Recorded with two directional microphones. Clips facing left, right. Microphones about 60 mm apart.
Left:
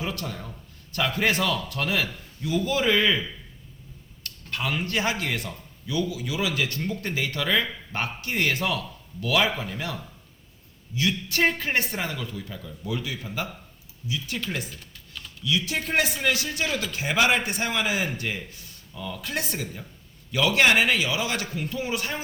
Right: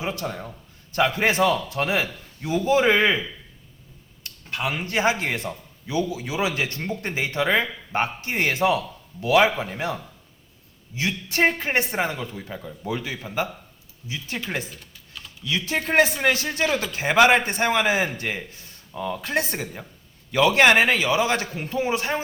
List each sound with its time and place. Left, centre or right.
0.0 s a man's voice: right
15.4 s a man's voice: right